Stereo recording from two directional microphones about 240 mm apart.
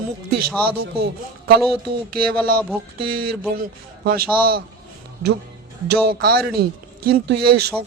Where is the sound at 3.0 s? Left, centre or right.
Right.